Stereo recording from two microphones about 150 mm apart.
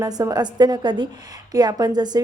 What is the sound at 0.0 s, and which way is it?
A woman's voice, 25° right (ahead or behind).